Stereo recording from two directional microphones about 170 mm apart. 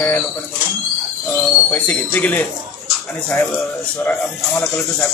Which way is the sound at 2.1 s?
10° left (ahead or behind).